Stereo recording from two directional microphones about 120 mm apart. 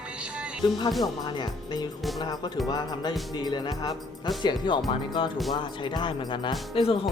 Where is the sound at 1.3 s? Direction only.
35° left (ahead or behind).